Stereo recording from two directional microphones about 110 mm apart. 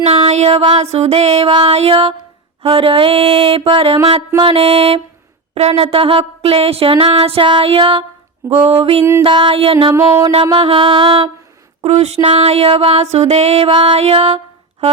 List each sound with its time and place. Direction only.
0.3 s music: 75° right (ahead or behind)
0.6 s a sound: 65° right (ahead or behind)
9.2 s music: 45° right (ahead or behind)
9.9 s a sound: 30° right (ahead or behind)
10.5 s music: 55° right (ahead or behind)
11.8 s music: 75° right (ahead or behind)
12.2 s music: 55° right (ahead or behind); by 13.7 s 75° right (ahead or behind)
13.7 s music: 50° right (ahead or behind)
14.0 s a sound: 65° right (ahead or behind)